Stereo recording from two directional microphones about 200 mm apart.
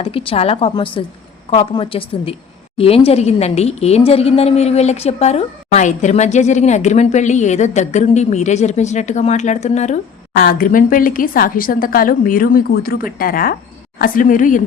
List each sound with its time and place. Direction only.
0.0 s a woman's voice: 30° left (ahead or behind)